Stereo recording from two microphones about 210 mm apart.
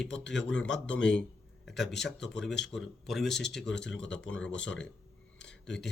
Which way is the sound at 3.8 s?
60° left (ahead or behind).